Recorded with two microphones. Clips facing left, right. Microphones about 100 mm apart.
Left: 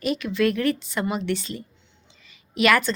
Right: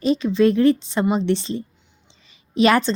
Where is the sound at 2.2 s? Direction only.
30° right (ahead or behind).